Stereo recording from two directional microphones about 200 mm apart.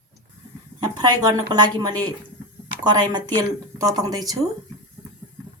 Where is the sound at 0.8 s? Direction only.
20° right (ahead or behind).